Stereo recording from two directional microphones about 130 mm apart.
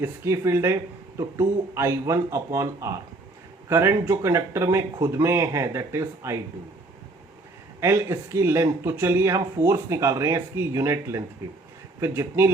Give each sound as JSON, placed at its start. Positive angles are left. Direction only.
{"t": 0.0, "sound": "speech", "side_deg": -20}
{"t": 7.8, "sound": "speech", "side_deg": -20}